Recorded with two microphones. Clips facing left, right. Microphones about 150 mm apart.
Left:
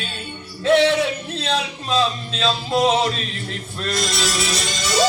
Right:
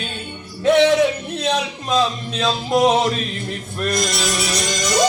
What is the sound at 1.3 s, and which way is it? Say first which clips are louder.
Speech: right 2 dB; 15° right (ahead or behind).